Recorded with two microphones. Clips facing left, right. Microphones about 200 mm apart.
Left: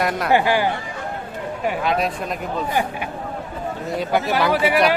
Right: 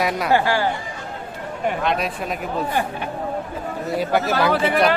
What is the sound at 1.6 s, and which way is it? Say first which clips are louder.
Speech: left 1 dB; 5° left (ahead or behind).